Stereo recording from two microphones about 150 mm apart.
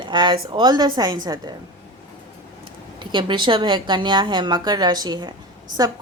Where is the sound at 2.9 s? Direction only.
30° right (ahead or behind).